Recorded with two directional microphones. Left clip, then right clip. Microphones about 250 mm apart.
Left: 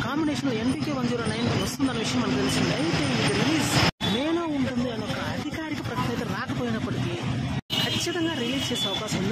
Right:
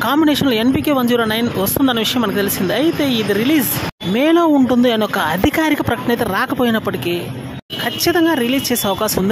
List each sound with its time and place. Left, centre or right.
0.0 s speech: right
4.2 s speech: right
6.3 s speech: right
8.0 s speech: right